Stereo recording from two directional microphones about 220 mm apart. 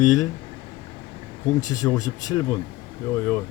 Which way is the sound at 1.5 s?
15° left (ahead or behind).